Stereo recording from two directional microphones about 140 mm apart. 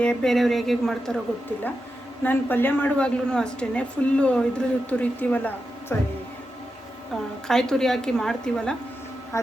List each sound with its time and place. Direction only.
0.0 s a woman's voice: 5° left (ahead or behind)
2.2 s a woman's voice: 15° left (ahead or behind)
7.1 s a woman's voice: 5° left (ahead or behind)
9.3 s speech: 20° left (ahead or behind)